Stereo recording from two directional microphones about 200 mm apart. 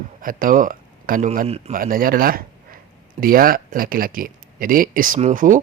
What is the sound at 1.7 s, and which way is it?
Speech, 45° right (ahead or behind).